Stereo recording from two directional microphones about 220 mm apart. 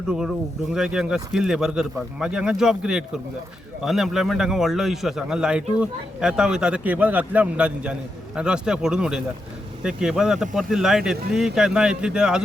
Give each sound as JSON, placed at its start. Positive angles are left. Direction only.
{"t": 0.1, "sound": "a man's voice", "side_deg": -5}